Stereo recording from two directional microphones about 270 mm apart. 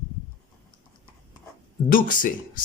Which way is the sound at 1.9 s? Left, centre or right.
Left.